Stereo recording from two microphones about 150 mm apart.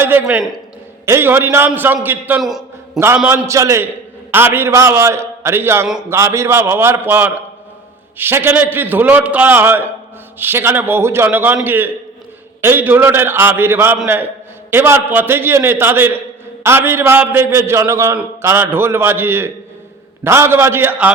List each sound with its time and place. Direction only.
0.0 s a man's voice: 10° right (ahead or behind)
2.4 s a sound: centre (ahead or behind)
3.2 s a man's voice: 15° right (ahead or behind)